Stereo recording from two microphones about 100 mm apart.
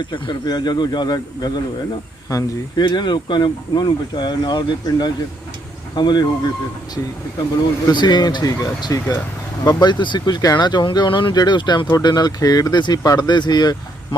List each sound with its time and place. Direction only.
0.0 s speech: 50° left (ahead or behind)
7.9 s speech: 45° left (ahead or behind)
9.8 s speech: 50° left (ahead or behind)